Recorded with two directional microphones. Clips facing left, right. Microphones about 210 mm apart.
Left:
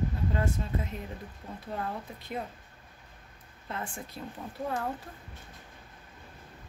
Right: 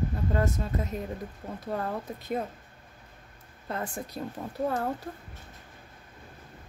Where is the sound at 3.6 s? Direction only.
40° right (ahead or behind).